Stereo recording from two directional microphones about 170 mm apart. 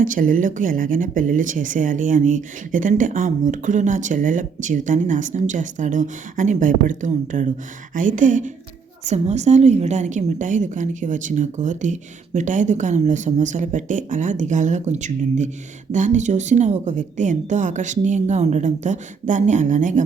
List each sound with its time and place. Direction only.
0.0 s speech: 50° right (ahead or behind)